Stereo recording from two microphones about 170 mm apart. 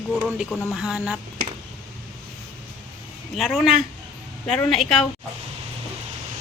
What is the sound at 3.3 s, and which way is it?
A woman's voice, centre (ahead or behind).